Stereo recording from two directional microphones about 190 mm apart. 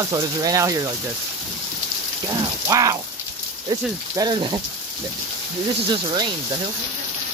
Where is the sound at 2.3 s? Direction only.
20° right (ahead or behind).